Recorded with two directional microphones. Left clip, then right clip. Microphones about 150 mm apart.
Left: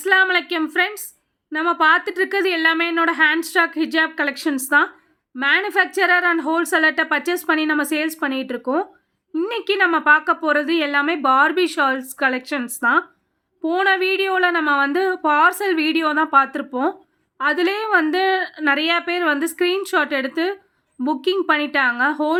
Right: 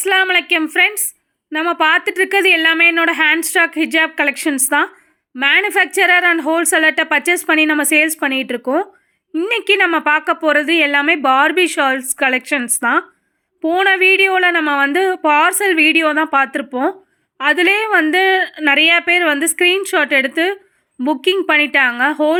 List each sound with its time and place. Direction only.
0.0 s a woman's voice: 15° right (ahead or behind)